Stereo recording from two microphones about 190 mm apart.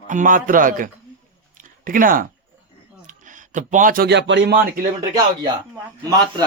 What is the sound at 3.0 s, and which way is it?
Speech, 40° right (ahead or behind).